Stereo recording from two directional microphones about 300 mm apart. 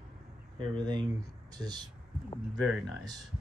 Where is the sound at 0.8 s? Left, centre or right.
Centre.